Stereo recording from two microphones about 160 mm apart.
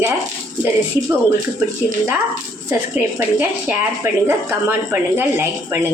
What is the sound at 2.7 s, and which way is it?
A woman's voice, 15° right (ahead or behind).